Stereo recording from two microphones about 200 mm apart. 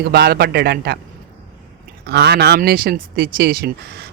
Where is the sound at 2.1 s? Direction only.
55° right (ahead or behind).